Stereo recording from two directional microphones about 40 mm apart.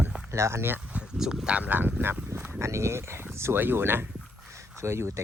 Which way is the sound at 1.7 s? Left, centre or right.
Right.